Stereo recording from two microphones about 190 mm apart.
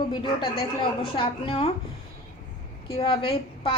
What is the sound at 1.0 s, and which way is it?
Speech, 30° left (ahead or behind).